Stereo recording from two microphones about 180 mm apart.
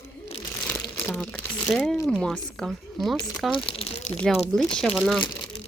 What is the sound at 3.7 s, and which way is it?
Speech, 35° left (ahead or behind).